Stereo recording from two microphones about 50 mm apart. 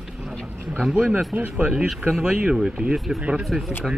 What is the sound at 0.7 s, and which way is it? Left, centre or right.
Speech, centre.